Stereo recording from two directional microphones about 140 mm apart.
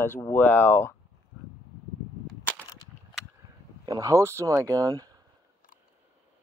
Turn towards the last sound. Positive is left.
turn(degrees=-25)  # may be behind; listen again after turning